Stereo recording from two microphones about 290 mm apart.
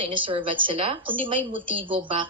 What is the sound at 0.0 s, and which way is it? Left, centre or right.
Speech, centre.